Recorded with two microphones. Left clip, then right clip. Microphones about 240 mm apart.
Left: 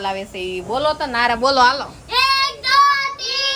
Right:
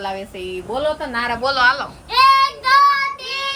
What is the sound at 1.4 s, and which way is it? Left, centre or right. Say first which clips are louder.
Speech: left 3 dB; left.